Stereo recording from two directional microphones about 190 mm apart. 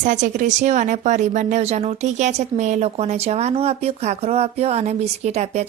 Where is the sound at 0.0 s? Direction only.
40° right (ahead or behind).